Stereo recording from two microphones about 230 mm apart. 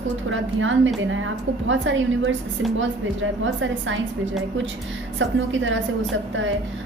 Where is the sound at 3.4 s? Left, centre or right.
Right.